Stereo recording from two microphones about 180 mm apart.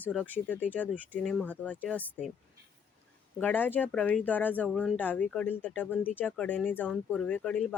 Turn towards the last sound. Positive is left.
turn(degrees=5)  # may be behind; listen again after turning